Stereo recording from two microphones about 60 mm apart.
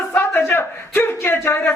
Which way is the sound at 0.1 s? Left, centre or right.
Left.